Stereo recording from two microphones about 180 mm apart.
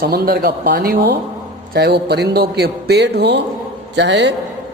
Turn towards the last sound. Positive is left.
turn(degrees=-75)  # may be behind; listen again after turning